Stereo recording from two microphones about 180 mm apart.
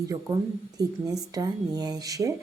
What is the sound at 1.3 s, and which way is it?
Speech, 20° right (ahead or behind).